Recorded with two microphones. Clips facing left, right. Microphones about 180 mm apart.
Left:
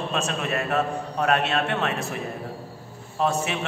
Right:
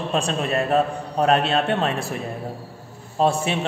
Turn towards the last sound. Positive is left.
turn(degrees=-30)  # may be behind; listen again after turning